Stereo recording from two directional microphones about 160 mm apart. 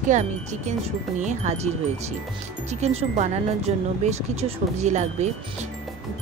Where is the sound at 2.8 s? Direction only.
45° right (ahead or behind).